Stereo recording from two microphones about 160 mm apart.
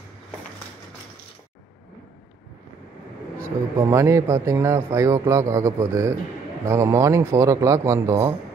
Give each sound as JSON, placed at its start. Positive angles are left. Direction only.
{"t": 3.4, "sound": "speech", "side_deg": -15}